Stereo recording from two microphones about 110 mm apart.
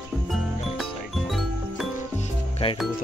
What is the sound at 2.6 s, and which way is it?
Music, 70° left (ahead or behind).